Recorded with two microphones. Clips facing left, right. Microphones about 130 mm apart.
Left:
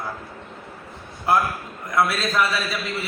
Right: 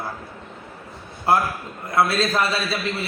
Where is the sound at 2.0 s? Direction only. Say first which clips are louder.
Right 2 dB; 30° right (ahead or behind).